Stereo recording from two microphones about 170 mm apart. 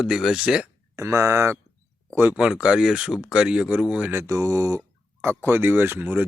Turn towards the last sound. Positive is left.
turn(degrees=-10)  # may be behind; listen again after turning